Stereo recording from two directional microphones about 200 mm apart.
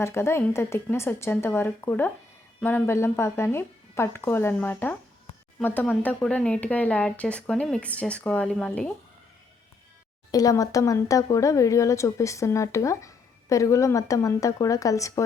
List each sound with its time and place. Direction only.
0.0 s speech: 10° left (ahead or behind)
10.3 s speech: 15° left (ahead or behind)